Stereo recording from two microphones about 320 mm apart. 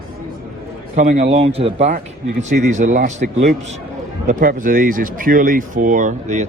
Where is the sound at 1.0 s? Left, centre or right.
Right.